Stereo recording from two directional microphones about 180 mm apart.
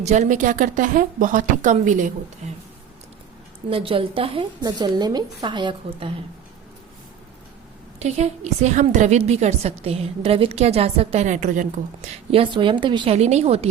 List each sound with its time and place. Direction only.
0.0 s a woman's voice: 40° right (ahead or behind)
3.7 s a woman's voice: 30° right (ahead or behind)
7.9 s a woman's voice: 40° right (ahead or behind)
12.0 s a woman's voice: 30° right (ahead or behind)
13.1 s a woman's voice: 35° right (ahead or behind)